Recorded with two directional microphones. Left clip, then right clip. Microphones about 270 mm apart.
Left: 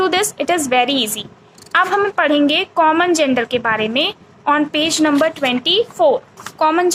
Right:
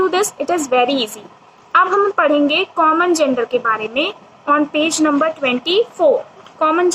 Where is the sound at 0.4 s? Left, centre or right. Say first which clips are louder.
Even; left.